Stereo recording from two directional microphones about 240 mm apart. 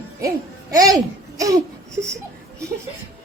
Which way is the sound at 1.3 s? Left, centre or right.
Centre.